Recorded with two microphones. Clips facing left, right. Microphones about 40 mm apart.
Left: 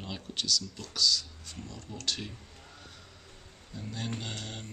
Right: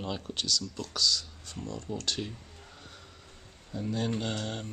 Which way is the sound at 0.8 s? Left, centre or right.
Right.